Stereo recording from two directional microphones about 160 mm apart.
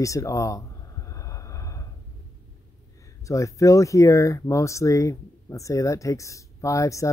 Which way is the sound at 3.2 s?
20° left (ahead or behind).